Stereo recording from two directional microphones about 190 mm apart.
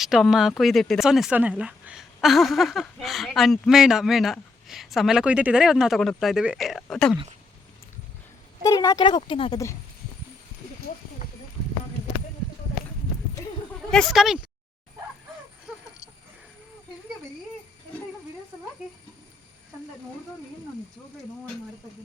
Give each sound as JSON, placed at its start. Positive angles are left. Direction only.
{"t": 0.0, "sound": "speech", "side_deg": 0}
{"t": 8.6, "sound": "speech", "side_deg": 20}
{"t": 13.9, "sound": "speech", "side_deg": 0}